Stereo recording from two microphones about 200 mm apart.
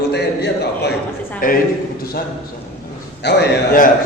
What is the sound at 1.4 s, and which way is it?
Speech, 45° left (ahead or behind).